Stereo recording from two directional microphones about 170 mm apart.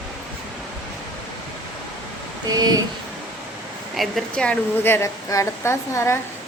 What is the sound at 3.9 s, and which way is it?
A woman's voice, centre (ahead or behind).